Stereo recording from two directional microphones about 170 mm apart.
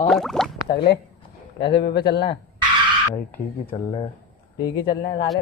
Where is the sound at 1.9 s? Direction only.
25° left (ahead or behind).